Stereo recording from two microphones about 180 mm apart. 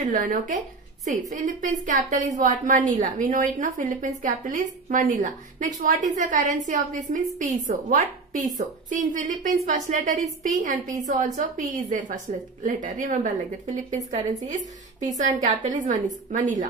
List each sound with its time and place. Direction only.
0.1 s a woman's voice: 45° right (ahead or behind)